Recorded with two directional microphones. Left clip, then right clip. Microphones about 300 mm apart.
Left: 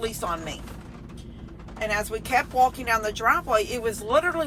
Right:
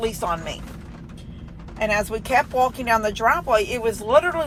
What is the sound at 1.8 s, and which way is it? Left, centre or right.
Speech, centre.